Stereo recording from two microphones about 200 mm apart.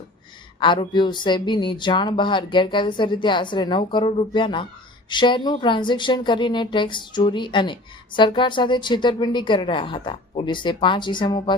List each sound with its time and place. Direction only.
0.6 s speech: 25° left (ahead or behind)